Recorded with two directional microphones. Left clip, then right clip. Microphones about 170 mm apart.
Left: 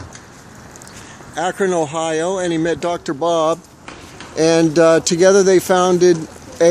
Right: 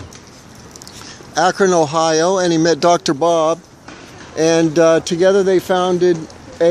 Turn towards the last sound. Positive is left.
turn(degrees=15)  # may be behind; listen again after turning